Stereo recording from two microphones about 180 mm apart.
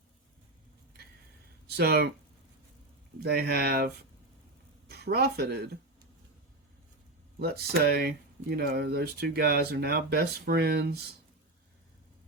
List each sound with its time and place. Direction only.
1.6 s speech: 60° right (ahead or behind)
3.2 s speech: 65° right (ahead or behind)
4.9 s speech: 65° right (ahead or behind)
7.3 s speech: 65° right (ahead or behind)